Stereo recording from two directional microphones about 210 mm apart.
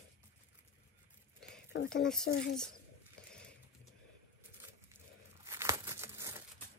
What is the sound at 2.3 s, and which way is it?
Speech, 65° left (ahead or behind).